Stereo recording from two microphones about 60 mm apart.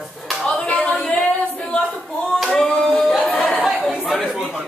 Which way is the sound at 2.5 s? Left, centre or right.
Centre.